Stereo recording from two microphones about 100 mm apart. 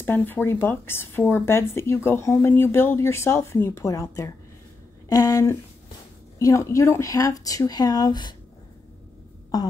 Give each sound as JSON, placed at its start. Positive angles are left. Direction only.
{"t": 0.0, "sound": "speech", "side_deg": 20}